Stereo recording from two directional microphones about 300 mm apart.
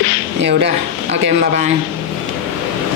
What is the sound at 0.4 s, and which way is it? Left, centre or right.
Speech, right.